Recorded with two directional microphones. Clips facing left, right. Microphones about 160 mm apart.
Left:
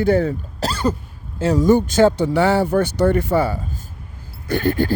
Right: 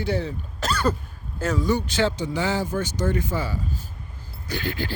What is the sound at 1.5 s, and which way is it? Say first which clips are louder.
A man's voice: left 10 dB; 45° left (ahead or behind).